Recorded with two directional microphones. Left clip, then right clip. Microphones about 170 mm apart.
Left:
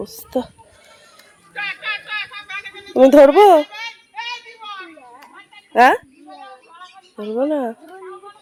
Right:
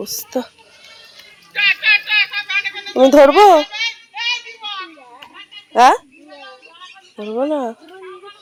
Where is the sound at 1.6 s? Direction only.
40° left (ahead or behind).